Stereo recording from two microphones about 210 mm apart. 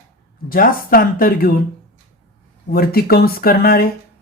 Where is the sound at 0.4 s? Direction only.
40° left (ahead or behind).